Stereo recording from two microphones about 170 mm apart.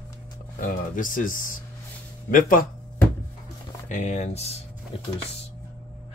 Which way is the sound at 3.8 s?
45° left (ahead or behind).